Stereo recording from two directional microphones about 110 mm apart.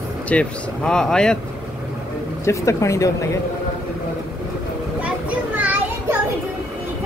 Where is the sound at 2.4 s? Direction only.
25° left (ahead or behind).